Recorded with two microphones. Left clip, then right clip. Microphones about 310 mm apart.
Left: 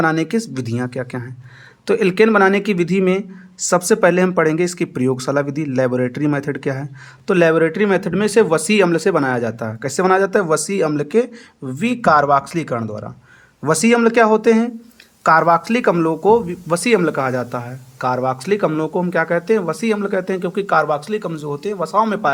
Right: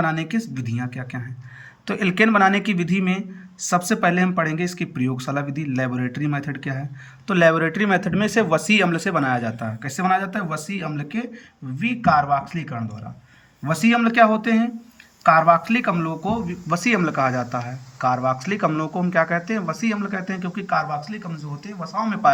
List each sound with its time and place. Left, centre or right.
0.0 s speech: centre